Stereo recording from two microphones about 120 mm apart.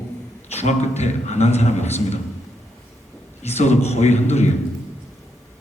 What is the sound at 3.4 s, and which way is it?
A man's voice, 65° left (ahead or behind).